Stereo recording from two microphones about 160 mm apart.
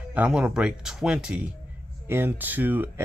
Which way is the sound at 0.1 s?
10° right (ahead or behind).